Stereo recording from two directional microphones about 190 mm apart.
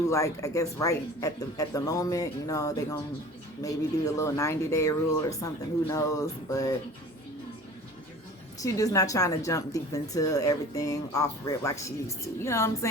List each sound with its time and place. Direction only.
0.0 s speech: 15° left (ahead or behind)
8.6 s speech: 20° left (ahead or behind)